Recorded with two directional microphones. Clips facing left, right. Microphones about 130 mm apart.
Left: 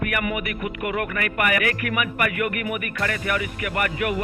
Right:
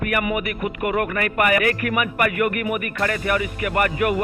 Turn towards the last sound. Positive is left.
turn(degrees=-35)  # may be behind; listen again after turning